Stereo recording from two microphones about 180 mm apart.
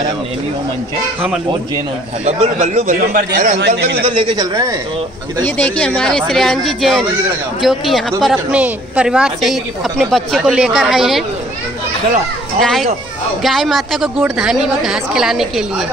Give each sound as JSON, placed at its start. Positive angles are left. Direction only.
{"t": 2.2, "sound": "a man's voice", "side_deg": -35}
{"t": 3.1, "sound": "a man's voice", "side_deg": -50}
{"t": 3.5, "sound": "a man's voice", "side_deg": -70}
{"t": 4.0, "sound": "a man's voice", "side_deg": -25}
{"t": 5.6, "sound": "a man's voice", "side_deg": 5}
{"t": 12.5, "sound": "a man's voice", "side_deg": 0}